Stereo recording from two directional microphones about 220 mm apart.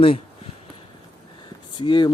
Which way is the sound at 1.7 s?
20° left (ahead or behind).